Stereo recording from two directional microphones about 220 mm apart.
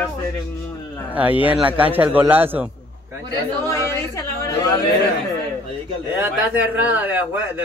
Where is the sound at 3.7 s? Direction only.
15° left (ahead or behind).